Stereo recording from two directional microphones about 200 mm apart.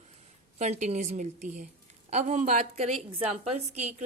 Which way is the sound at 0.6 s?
35° right (ahead or behind).